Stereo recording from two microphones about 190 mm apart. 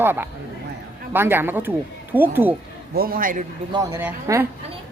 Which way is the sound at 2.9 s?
50° right (ahead or behind).